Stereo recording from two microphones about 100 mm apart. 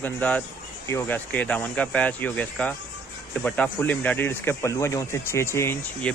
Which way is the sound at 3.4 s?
15° left (ahead or behind).